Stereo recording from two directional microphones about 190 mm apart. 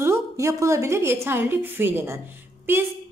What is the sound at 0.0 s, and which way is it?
A woman's voice, 15° right (ahead or behind).